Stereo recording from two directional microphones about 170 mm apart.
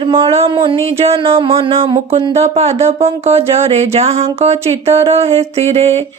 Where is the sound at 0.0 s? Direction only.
30° right (ahead or behind).